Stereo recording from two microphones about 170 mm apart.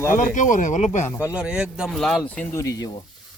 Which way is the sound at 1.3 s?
5° right (ahead or behind).